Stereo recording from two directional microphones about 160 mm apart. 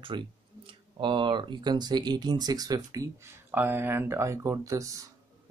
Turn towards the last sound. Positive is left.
turn(degrees=-20)  # may be behind; listen again after turning